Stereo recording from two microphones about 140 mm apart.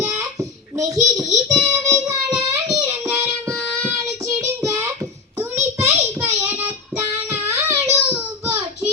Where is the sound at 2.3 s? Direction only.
5° right (ahead or behind).